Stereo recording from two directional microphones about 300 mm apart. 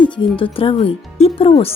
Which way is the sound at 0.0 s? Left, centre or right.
Centre.